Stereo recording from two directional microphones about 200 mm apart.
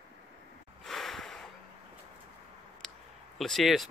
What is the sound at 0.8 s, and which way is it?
Snort, centre (ahead or behind).